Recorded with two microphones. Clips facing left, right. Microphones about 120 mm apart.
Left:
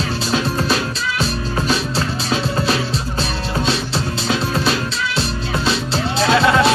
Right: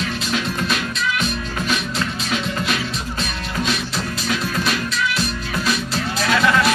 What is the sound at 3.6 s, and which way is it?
Music, 30° left (ahead or behind).